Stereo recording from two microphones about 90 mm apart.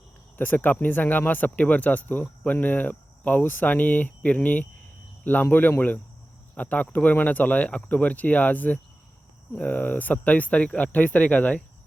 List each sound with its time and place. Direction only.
0.3 s speech: 20° left (ahead or behind)